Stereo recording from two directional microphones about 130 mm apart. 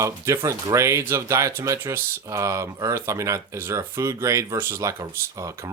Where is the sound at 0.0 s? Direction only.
25° right (ahead or behind).